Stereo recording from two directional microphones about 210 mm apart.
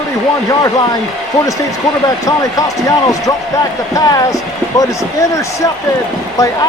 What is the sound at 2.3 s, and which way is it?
Speech, 15° left (ahead or behind).